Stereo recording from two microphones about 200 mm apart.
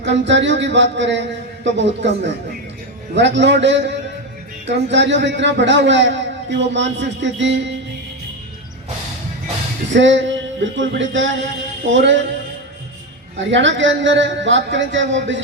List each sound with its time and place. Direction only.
0.0 s a man's voice: 60° right (ahead or behind)
9.9 s a man's voice: 65° right (ahead or behind)
13.4 s a man's voice: 65° right (ahead or behind)